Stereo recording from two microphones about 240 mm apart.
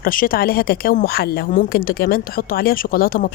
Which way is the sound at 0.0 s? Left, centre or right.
Left.